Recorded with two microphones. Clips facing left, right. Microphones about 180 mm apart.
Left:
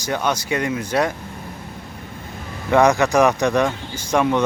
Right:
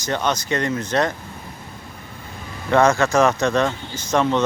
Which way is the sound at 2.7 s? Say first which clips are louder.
Left 1 dB; 15° left (ahead or behind).